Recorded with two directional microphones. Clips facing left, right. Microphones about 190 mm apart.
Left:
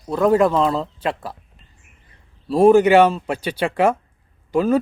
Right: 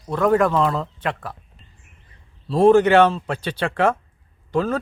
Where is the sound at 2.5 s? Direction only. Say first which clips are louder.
Left 2 dB; 5° left (ahead or behind).